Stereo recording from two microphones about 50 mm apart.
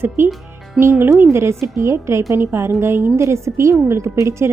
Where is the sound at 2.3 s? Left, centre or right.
Right.